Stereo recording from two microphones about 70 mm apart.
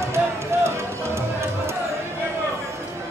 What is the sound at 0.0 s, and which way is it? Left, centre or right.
Music, right.